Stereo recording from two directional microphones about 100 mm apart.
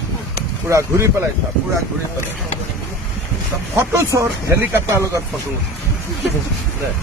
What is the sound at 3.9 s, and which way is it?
Speech, 30° right (ahead or behind).